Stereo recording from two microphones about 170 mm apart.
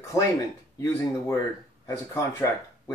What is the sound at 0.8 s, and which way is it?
Speech, 15° left (ahead or behind).